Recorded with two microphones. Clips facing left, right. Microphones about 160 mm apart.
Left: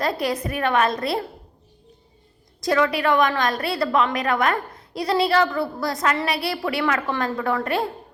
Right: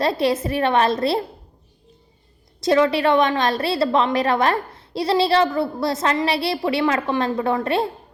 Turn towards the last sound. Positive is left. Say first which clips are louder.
# right 3 dB
turn(degrees=-25)  # may be behind; listen again after turning